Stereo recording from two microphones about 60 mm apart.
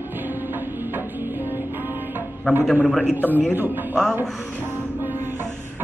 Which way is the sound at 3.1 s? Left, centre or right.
Right.